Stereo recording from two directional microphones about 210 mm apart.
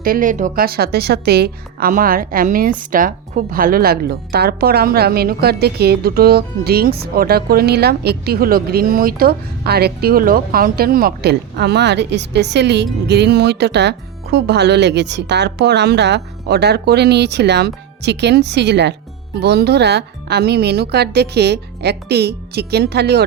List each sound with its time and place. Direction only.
0.0 s a woman's voice: 40° right (ahead or behind)